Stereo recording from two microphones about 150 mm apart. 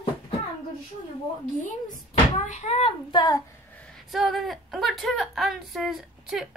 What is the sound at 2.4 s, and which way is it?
A child's voice, 50° left (ahead or behind).